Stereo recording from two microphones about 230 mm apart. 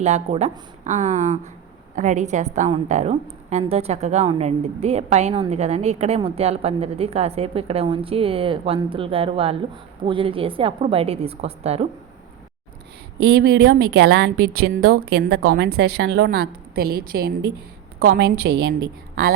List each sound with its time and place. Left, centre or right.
0.0 s a woman's voice: right
13.4 s a woman's voice: right